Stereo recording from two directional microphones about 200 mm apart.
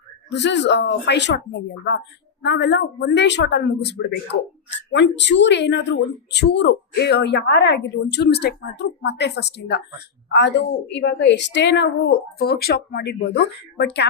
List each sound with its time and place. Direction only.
0.3 s a woman's voice: 60° left (ahead or behind)